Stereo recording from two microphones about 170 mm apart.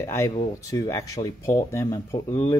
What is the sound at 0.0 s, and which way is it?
Speech, 20° left (ahead or behind).